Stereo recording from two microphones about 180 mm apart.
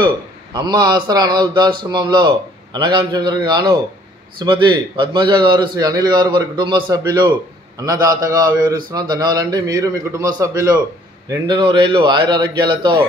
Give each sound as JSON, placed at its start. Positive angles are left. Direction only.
{"t": 0.0, "sound": "a man's voice", "side_deg": -25}